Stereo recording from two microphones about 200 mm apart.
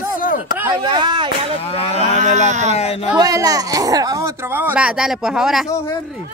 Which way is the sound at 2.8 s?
30° left (ahead or behind).